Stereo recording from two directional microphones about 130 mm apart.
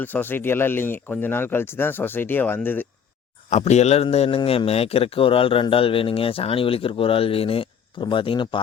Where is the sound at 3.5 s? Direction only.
60° left (ahead or behind).